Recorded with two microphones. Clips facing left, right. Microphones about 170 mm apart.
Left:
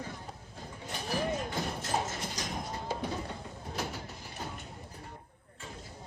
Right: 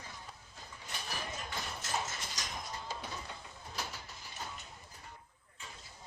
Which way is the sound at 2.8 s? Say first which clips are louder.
Left 8 dB; 55° left (ahead or behind).